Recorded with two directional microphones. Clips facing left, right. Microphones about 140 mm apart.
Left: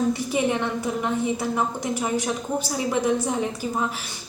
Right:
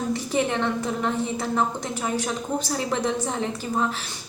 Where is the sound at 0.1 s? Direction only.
15° left (ahead or behind).